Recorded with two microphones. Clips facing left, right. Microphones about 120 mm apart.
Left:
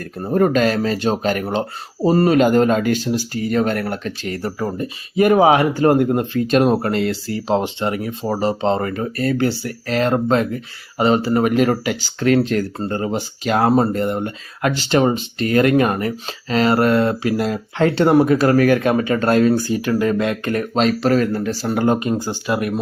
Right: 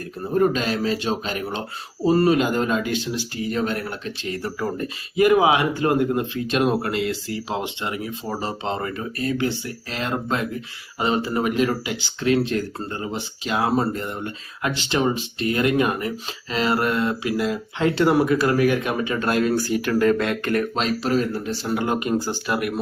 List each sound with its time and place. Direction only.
0.2 s speech: 55° left (ahead or behind); by 6.0 s 40° left (ahead or behind)
6.0 s speech: 50° left (ahead or behind)
11.3 s speech: 50° left (ahead or behind)
12.9 s speech: 40° left (ahead or behind)
18.3 s speech: 50° left (ahead or behind)
19.5 s speech: 20° left (ahead or behind)
21.0 s speech: 60° left (ahead or behind)
21.8 s speech: 30° left (ahead or behind)
22.1 s speech: 15° left (ahead or behind)